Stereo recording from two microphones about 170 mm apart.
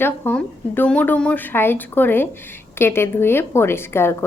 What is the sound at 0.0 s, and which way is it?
A woman's voice, 10° left (ahead or behind).